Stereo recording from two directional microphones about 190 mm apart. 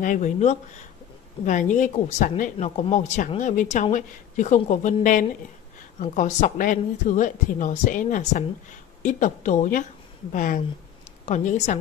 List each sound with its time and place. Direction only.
0.0 s a woman's voice: 40° left (ahead or behind)